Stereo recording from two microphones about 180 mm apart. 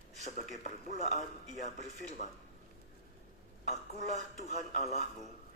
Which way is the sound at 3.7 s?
40° left (ahead or behind).